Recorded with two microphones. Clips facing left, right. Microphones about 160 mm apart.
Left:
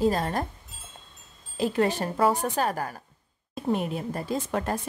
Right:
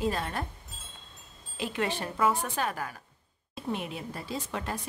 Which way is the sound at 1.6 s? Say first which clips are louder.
Left 7 dB; 40° left (ahead or behind).